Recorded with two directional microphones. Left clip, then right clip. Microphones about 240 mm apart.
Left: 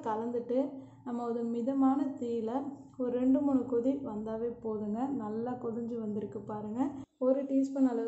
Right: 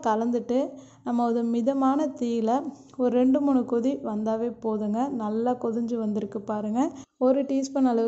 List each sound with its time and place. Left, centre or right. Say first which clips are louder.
0.0 s a woman's voice: right 9 dB; right